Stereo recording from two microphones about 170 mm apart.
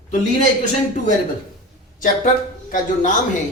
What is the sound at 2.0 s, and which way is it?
Speech, 50° left (ahead or behind).